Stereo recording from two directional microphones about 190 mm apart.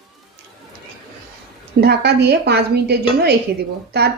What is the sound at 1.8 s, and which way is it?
Speech, 60° right (ahead or behind).